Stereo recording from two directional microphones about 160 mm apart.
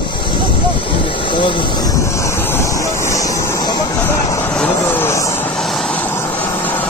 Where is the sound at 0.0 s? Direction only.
30° left (ahead or behind).